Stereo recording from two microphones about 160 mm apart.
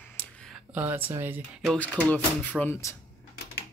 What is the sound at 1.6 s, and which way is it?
Speech, 5° left (ahead or behind).